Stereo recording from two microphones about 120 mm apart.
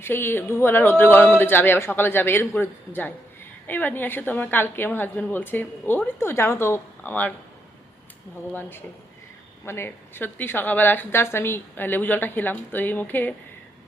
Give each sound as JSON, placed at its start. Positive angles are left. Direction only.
{"t": 0.0, "sound": "a woman's voice", "side_deg": 20}
{"t": 9.6, "sound": "a woman's voice", "side_deg": 20}